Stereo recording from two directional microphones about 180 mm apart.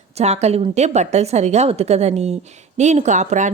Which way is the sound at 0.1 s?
35° right (ahead or behind).